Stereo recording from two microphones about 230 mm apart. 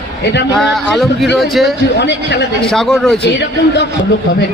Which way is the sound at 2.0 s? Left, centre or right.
Left.